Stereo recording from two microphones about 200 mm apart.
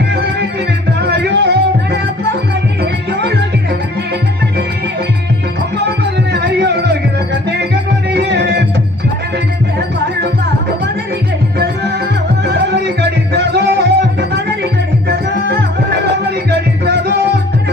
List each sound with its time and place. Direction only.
0.1 s music: 55° right (ahead or behind)
6.3 s music: 55° right (ahead or behind)
9.7 s music: 55° right (ahead or behind)
11.6 s music: 55° right (ahead or behind)